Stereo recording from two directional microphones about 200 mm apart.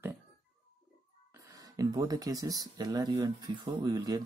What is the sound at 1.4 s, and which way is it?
Speech, 15° right (ahead or behind).